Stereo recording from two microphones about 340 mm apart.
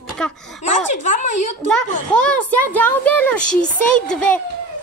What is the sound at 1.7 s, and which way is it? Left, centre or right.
A woman's voice, centre.